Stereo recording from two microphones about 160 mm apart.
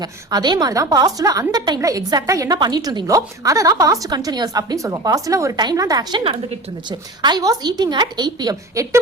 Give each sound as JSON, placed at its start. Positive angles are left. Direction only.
{"t": 0.0, "sound": "a woman's voice", "side_deg": -25}